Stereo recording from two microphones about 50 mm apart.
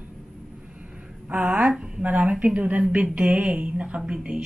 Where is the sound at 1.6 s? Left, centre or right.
Centre.